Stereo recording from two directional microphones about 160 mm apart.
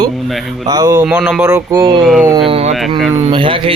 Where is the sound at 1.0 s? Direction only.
5° right (ahead or behind).